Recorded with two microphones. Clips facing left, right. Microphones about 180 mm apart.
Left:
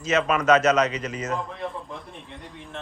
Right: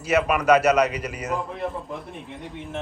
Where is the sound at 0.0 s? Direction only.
10° right (ahead or behind).